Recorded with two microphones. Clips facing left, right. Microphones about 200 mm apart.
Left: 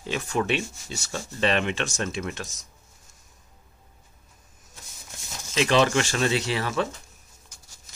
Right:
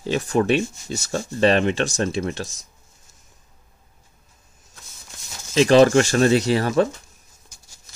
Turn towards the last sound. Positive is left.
turn(degrees=-40)  # may be behind; listen again after turning